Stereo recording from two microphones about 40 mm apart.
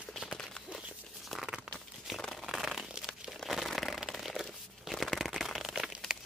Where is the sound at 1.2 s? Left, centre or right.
Centre.